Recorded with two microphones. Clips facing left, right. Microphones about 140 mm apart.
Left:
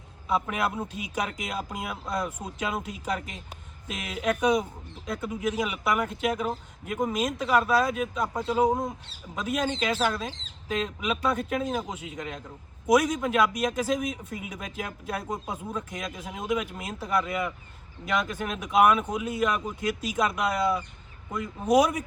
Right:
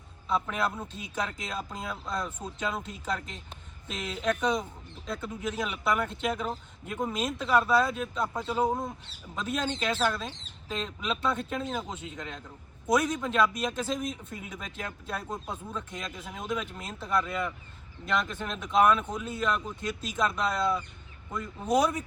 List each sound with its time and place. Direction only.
0.3 s speech: 10° left (ahead or behind)
8.6 s speech: 15° left (ahead or behind)